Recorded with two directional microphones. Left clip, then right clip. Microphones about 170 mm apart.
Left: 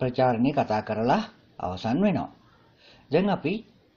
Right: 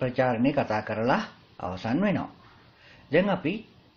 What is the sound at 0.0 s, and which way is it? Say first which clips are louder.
Speech: left 1 dB; 30° left (ahead or behind).